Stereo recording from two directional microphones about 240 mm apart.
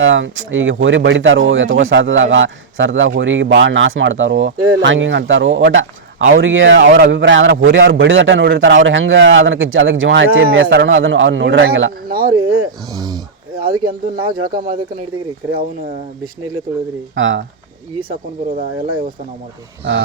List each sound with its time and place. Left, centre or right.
0.0 s speech: right
12.9 s speech: centre
13.6 s speech: right
14.2 s speech: centre
17.2 s speech: right
18.1 s speech: right